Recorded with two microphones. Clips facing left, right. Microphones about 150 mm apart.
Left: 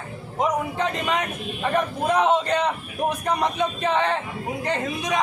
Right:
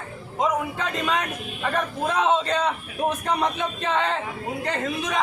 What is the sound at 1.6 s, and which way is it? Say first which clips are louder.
Speech: left 3 dB; 15° left (ahead or behind).